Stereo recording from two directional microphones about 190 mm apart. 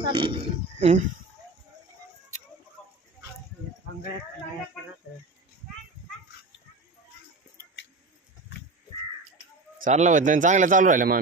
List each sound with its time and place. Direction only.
0.0 s speech: 25° right (ahead or behind)
2.8 s chicken: centre (ahead or behind)
9.8 s a man's voice: 40° right (ahead or behind)